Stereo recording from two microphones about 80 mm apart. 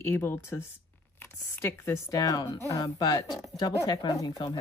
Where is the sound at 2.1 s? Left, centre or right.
Left.